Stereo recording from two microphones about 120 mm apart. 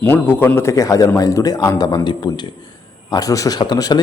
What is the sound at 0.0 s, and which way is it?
A man's voice, 15° left (ahead or behind).